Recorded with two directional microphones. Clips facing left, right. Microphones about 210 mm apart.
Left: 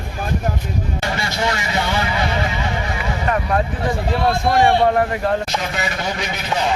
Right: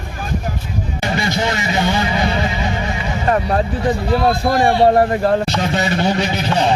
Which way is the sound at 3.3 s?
35° right (ahead or behind).